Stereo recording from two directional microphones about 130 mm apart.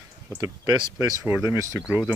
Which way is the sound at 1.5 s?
25° right (ahead or behind).